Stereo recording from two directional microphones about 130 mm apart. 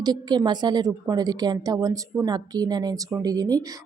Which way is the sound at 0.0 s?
35° right (ahead or behind).